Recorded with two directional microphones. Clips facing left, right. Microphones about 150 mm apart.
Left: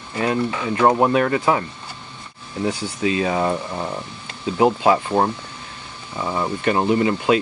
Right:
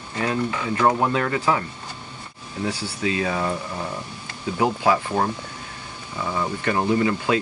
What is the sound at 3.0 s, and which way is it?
Speech, 25° left (ahead or behind).